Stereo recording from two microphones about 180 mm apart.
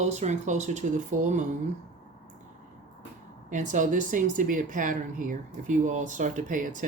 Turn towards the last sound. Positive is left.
turn(degrees=-45)  # may be behind; listen again after turning